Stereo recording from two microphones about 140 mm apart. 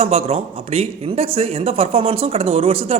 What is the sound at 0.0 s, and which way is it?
Speech, 45° right (ahead or behind).